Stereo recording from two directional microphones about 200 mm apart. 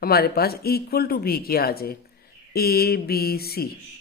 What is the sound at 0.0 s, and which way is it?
Speech, 50° left (ahead or behind).